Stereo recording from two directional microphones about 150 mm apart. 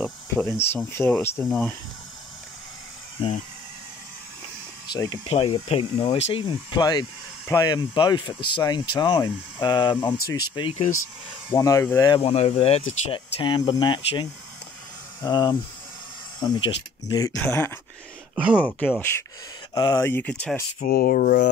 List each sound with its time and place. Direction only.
0.0 s speech: 10° left (ahead or behind)
4.9 s speech: 30° left (ahead or behind)
5.3 s speech: 40° left (ahead or behind); by 12.2 s 20° left (ahead or behind)
12.2 s speech: 40° left (ahead or behind)
15.2 s speech: 30° left (ahead or behind)
18.3 s speech: 5° right (ahead or behind)
18.6 s speech: 10° left (ahead or behind)
19.7 s speech: 25° left (ahead or behind); by 20.5 s 10° left (ahead or behind)
20.8 s speech: 75° left (ahead or behind)